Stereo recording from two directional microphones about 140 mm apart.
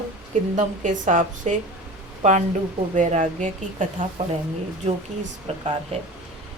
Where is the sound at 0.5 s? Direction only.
60° right (ahead or behind).